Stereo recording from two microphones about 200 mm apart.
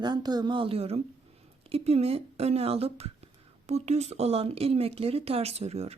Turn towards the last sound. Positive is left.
turn(degrees=-30)  # may be behind; listen again after turning